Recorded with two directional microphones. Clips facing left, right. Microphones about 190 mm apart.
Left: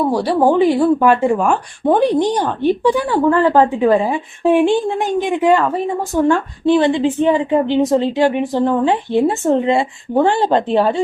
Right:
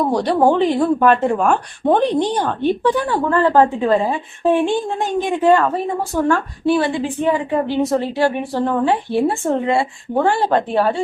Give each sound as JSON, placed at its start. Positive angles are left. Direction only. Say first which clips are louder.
{"t": 0.0, "sound": "a woman's voice", "louder": "left 1 dB", "side_deg": 5}